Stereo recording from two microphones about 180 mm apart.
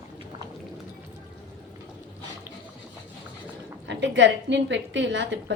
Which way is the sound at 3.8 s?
80° right.